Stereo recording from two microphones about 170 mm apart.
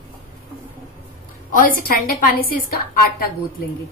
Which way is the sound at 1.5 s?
55° left (ahead or behind).